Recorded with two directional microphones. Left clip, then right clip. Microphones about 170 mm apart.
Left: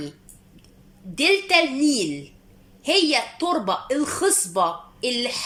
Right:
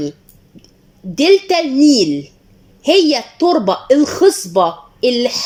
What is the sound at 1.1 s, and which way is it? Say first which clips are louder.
Speech: right 7 dB; 40° right (ahead or behind).